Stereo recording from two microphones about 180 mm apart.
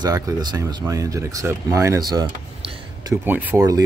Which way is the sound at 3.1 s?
10° right (ahead or behind).